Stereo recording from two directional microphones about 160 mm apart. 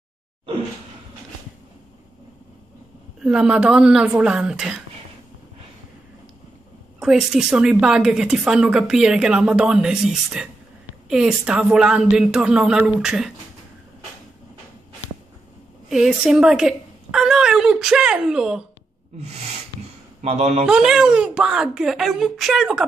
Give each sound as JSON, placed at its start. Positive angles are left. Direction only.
{"t": 3.2, "sound": "a woman's voice", "side_deg": -5}
{"t": 7.0, "sound": "a woman's voice", "side_deg": -5}
{"t": 15.9, "sound": "speech", "side_deg": -5}
{"t": 20.2, "sound": "speech", "side_deg": -45}
{"t": 20.6, "sound": "a woman's voice", "side_deg": -5}